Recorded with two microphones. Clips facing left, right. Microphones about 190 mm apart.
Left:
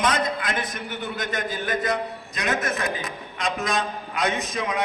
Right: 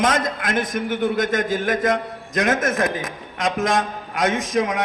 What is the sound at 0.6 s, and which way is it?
A man's voice, 90° right.